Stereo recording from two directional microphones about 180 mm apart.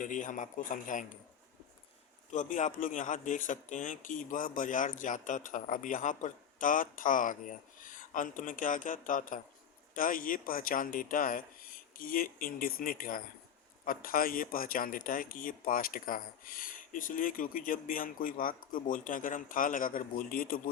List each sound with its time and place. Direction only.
0.0 s speech: 45° left (ahead or behind)
2.3 s speech: 45° left (ahead or behind)